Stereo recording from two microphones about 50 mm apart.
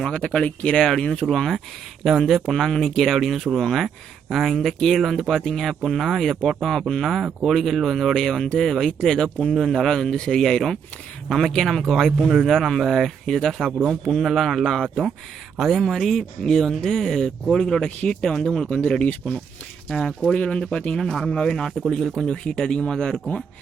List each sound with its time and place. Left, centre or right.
0.0 s speech: centre
0.4 s speech: left
0.8 s speech: centre
1.3 s speech: centre
17.8 s speech: left
19.9 s speech: centre
20.3 s speech: left
21.0 s speech: centre